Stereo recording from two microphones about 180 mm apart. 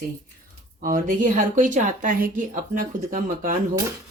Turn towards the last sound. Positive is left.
turn(degrees=-45)  # may be behind; listen again after turning